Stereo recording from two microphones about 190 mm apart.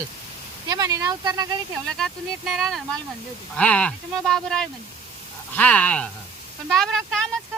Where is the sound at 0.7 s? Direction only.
20° right (ahead or behind).